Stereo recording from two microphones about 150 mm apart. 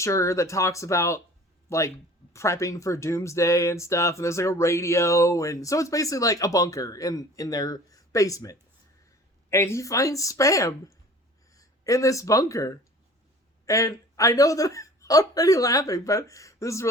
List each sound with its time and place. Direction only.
0.0 s speech: 20° left (ahead or behind)